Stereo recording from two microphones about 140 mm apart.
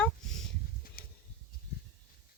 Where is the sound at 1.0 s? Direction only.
90° left.